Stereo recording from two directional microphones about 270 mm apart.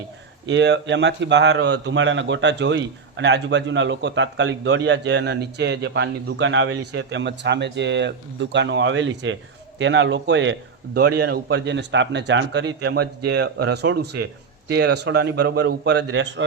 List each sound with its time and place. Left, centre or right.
0.4 s speech: right